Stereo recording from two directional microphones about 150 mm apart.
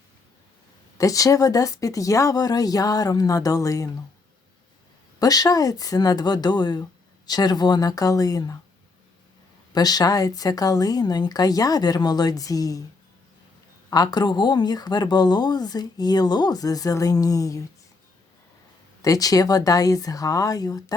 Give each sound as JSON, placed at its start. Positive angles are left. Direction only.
{"t": 0.9, "sound": "speech", "side_deg": 20}
{"t": 5.2, "sound": "speech", "side_deg": 25}
{"t": 9.7, "sound": "speech", "side_deg": 25}
{"t": 13.9, "sound": "speech", "side_deg": 25}
{"t": 19.0, "sound": "speech", "side_deg": 25}